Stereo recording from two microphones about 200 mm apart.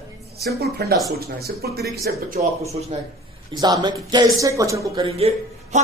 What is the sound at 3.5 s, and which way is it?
A man's voice, 20° right (ahead or behind).